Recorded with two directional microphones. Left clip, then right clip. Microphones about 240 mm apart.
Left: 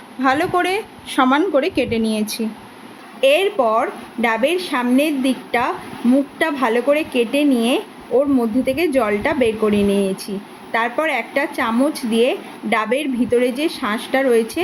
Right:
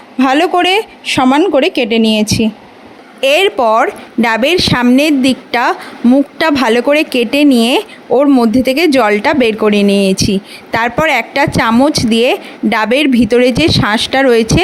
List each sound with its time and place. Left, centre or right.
0.2 s a woman's voice: right
3.2 s a woman's voice: right